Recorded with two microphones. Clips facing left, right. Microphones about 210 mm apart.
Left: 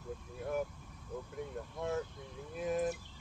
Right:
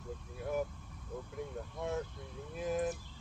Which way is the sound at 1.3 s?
Centre (ahead or behind).